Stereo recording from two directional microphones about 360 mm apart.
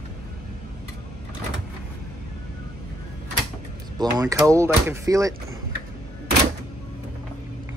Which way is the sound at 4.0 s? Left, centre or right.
Centre.